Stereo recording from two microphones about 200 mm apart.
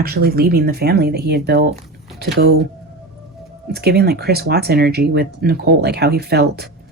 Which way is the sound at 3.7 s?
55° right (ahead or behind).